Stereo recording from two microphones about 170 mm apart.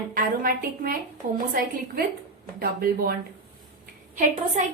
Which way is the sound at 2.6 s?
60° right (ahead or behind).